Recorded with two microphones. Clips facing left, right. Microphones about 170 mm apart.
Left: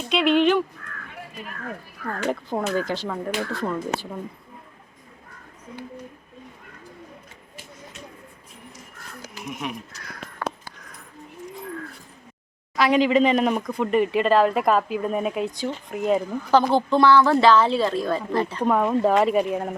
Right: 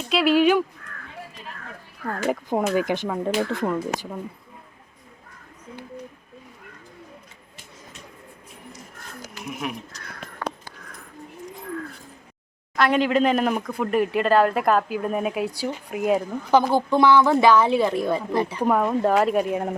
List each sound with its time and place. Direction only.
0.1 s speech: 5° right (ahead or behind)
2.0 s a woman's voice: 10° right (ahead or behind)
9.4 s speech: 5° right (ahead or behind)
12.7 s a woman's voice: centre (ahead or behind)